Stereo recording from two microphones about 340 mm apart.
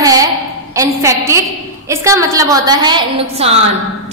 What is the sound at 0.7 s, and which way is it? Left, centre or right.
A woman's voice, centre.